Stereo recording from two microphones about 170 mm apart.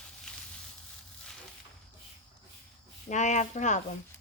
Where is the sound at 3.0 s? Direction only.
45° left (ahead or behind).